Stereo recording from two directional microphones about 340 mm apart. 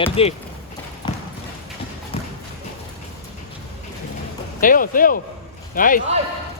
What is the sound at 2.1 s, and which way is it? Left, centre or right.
Clip-clop, centre.